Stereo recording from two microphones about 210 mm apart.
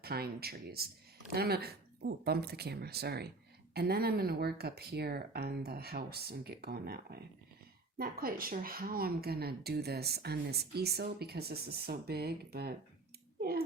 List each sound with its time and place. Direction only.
0.0 s a woman's voice: 50° right (ahead or behind)